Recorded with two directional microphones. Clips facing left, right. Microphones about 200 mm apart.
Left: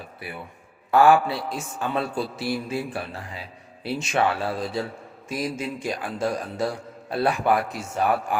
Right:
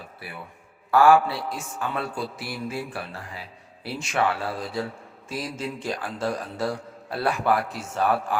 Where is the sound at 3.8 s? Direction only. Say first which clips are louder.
Left 5 dB; 20° left (ahead or behind).